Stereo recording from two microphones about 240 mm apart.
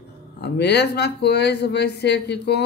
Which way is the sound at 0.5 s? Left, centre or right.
Left.